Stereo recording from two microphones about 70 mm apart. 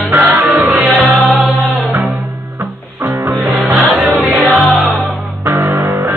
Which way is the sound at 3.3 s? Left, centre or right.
Centre.